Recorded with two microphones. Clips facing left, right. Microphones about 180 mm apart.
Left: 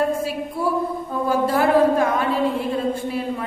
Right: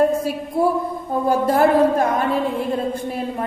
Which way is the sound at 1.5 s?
45° right (ahead or behind).